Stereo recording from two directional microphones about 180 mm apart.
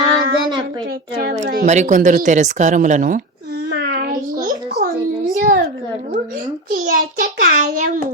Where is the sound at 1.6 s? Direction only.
40° right (ahead or behind).